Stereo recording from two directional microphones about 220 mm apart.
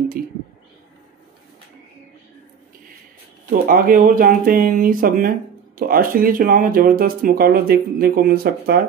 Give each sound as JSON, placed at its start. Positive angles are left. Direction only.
{"t": 3.6, "sound": "speech", "side_deg": -40}